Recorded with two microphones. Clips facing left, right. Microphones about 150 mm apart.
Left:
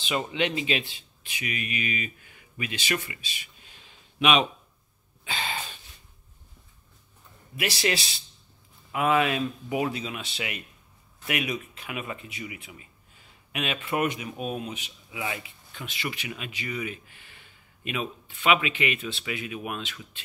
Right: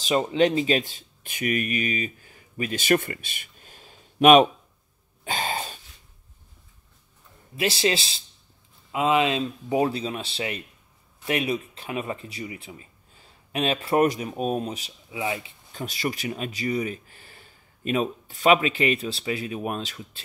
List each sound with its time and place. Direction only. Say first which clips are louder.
0.0 s speech: right 7 dB; 35° right (ahead or behind)
5.2 s a sound: right 5 dB; 45° right (ahead or behind)
7.5 s speech: right 4 dB; 25° right (ahead or behind)